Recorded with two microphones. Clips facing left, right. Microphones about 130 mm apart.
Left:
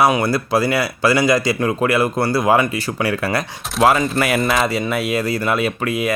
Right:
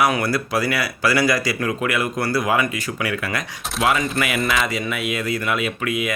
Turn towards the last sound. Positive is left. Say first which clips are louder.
# left 4 dB
turn(degrees=35)  # may be behind; listen again after turning